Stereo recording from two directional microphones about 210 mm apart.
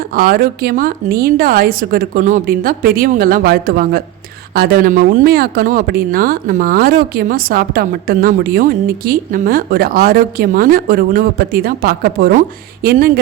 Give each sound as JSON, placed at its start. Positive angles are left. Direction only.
{"t": 0.1, "sound": "speech", "side_deg": -45}